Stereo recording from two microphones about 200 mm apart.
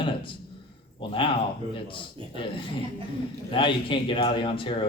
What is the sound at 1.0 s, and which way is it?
Speech, 25° left (ahead or behind).